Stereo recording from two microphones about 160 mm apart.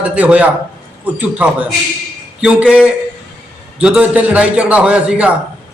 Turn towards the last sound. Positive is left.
turn(degrees=-5)  # may be behind; listen again after turning